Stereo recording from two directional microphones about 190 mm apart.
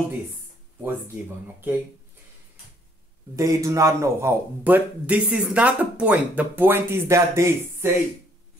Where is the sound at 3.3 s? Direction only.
15° right (ahead or behind).